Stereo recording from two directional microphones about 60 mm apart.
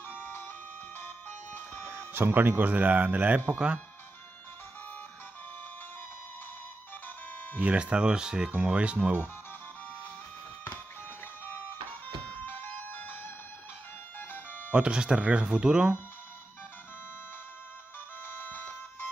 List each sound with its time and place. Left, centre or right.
1.8 s speech: right
7.5 s speech: right
12.3 s music: left
14.7 s speech: centre
18.2 s music: left